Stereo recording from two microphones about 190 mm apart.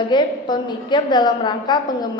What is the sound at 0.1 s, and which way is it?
A woman's voice, 25° left (ahead or behind).